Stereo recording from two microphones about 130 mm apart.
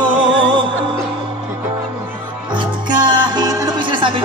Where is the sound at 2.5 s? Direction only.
35° right (ahead or behind).